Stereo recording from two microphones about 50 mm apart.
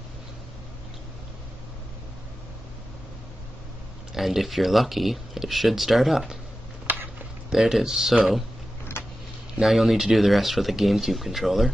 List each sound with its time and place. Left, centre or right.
4.1 s speech: centre
7.5 s speech: centre
9.0 s a sound: left
9.6 s speech: centre